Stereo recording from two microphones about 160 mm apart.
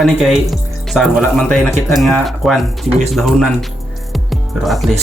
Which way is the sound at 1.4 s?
5° left (ahead or behind).